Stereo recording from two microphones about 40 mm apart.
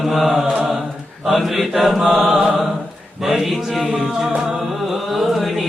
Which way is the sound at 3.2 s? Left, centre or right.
Centre.